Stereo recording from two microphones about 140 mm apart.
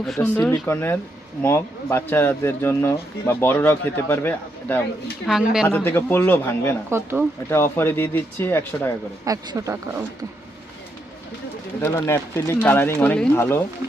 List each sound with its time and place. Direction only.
0.2 s speech: 10° left (ahead or behind)
5.2 s speech: 5° right (ahead or behind)
5.6 s speech: 15° left (ahead or behind)
6.9 s speech: 15° right (ahead or behind)
7.5 s speech: 15° left (ahead or behind)
9.2 s speech: 25° right (ahead or behind)
11.8 s speech: 20° left (ahead or behind)